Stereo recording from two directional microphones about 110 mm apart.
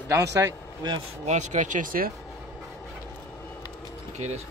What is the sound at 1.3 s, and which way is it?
Speech, 90° right.